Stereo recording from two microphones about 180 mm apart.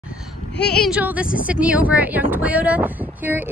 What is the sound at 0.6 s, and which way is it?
A woman's voice, 5° left (ahead or behind).